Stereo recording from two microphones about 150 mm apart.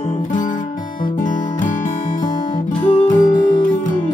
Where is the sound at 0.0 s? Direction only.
55° left (ahead or behind).